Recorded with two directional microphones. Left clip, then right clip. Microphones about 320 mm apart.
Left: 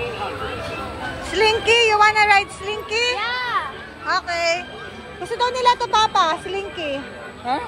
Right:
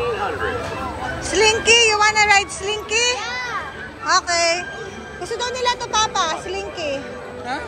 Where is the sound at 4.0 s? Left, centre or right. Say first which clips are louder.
Right 3 dB; centre.